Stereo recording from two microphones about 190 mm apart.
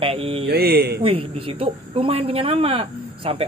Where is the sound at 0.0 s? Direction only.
30° right (ahead or behind).